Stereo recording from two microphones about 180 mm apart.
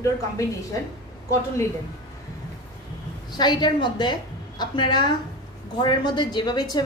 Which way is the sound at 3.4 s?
25° left (ahead or behind).